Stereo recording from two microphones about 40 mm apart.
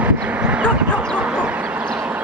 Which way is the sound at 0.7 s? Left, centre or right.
Right.